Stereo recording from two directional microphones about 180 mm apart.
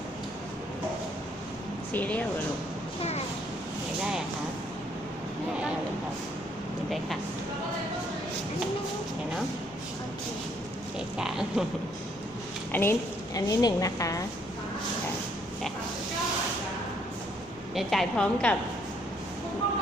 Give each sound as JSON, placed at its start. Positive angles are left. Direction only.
{"t": 1.9, "sound": "speech", "side_deg": 10}
{"t": 11.2, "sound": "a woman's voice", "side_deg": -5}
{"t": 12.7, "sound": "a woman's voice", "side_deg": 15}
{"t": 17.7, "sound": "a woman's voice", "side_deg": 5}